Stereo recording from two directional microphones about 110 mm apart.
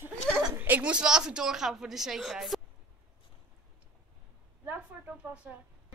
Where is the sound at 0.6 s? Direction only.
15° right (ahead or behind).